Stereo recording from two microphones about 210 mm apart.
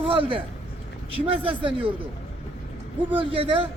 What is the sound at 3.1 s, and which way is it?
Speech, 25° right (ahead or behind).